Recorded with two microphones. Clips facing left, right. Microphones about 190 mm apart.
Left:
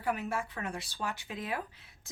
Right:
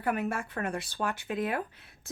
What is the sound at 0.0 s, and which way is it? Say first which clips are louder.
Speech: right 3 dB; 55° right (ahead or behind).